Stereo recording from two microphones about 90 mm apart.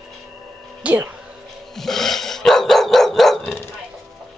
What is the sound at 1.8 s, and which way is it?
Dog, 5° left (ahead or behind).